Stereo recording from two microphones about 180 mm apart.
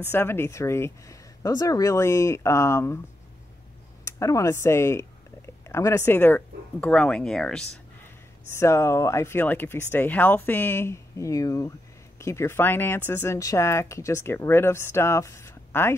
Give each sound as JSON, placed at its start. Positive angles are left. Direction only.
{"t": 0.1, "sound": "speech", "side_deg": 15}
{"t": 4.0, "sound": "speech", "side_deg": 15}
{"t": 8.5, "sound": "speech", "side_deg": 15}